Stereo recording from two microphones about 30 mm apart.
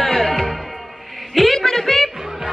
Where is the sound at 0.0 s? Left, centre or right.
Centre.